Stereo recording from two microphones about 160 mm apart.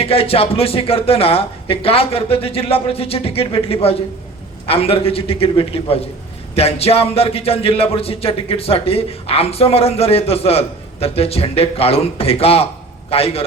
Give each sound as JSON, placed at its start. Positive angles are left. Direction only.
{"t": 0.0, "sound": "a man's voice", "side_deg": 35}